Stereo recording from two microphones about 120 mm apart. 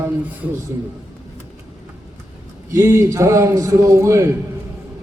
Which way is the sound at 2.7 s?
25° right (ahead or behind).